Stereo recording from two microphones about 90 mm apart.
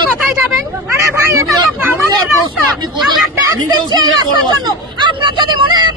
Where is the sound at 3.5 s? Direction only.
45° right (ahead or behind).